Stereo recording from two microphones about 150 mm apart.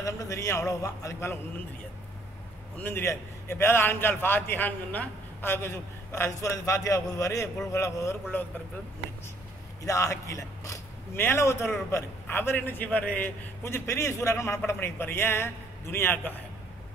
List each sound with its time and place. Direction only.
0.0 s a man's voice: 20° left (ahead or behind)
2.8 s a man's voice: 15° left (ahead or behind)
9.8 s a man's voice: 20° left (ahead or behind)